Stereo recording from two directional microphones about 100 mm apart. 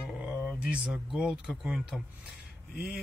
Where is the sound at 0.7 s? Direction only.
5° right (ahead or behind).